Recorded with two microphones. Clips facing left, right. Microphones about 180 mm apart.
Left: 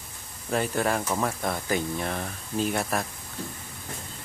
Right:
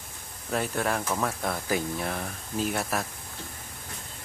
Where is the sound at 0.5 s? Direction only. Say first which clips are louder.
Left 2 dB; centre (ahead or behind).